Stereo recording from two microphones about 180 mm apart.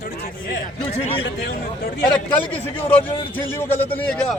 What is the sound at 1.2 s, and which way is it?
Speech, 70° left (ahead or behind).